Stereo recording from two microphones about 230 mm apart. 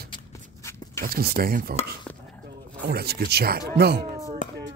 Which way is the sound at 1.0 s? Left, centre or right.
Right.